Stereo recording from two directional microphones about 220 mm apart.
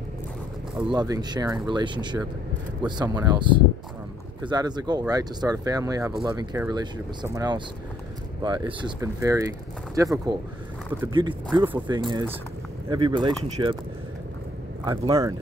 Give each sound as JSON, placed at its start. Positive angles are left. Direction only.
{"t": 0.8, "sound": "speech", "side_deg": -15}
{"t": 11.1, "sound": "speech", "side_deg": -20}
{"t": 14.9, "sound": "speech", "side_deg": -15}